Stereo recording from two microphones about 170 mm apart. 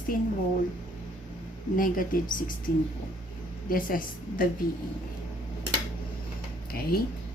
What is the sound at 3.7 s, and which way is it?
Speech, 55° left (ahead or behind).